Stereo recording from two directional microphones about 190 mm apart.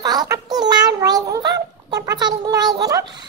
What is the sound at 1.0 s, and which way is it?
Child singing, 20° right (ahead or behind).